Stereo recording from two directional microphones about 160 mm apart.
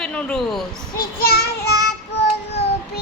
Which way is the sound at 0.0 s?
5° left (ahead or behind).